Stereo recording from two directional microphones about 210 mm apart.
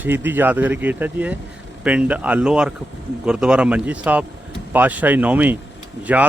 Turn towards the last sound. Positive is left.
turn(degrees=-5)  # may be behind; listen again after turning